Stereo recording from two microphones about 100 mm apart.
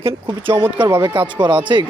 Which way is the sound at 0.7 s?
50° right (ahead or behind).